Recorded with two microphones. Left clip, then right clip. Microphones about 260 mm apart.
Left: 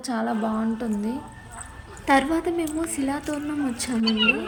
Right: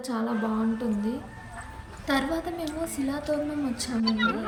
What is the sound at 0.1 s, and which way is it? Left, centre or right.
Speech, centre.